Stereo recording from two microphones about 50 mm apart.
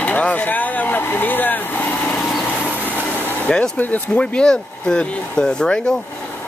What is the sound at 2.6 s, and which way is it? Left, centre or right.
Train, right.